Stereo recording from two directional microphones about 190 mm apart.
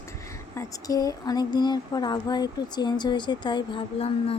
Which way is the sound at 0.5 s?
15° left (ahead or behind).